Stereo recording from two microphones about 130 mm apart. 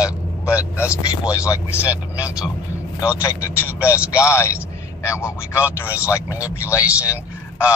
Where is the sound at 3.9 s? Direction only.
10° right (ahead or behind).